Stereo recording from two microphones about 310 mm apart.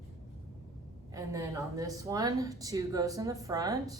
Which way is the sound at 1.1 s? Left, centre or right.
Centre.